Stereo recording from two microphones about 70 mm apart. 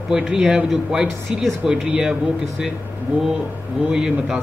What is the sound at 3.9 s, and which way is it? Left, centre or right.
Speech, centre.